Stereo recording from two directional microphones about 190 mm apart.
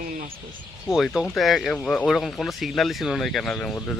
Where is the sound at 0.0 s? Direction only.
45° right (ahead or behind).